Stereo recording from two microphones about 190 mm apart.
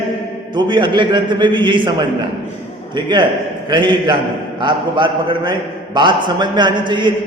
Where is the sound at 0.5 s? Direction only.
25° right (ahead or behind).